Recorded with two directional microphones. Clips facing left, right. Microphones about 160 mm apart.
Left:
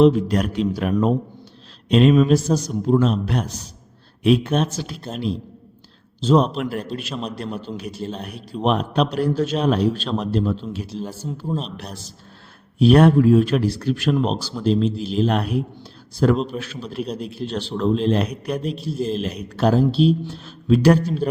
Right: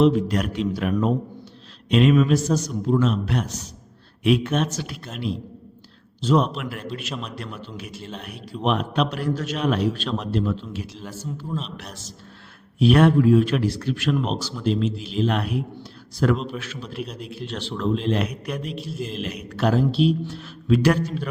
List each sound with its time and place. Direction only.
0.0 s a man's voice: 35° left (ahead or behind)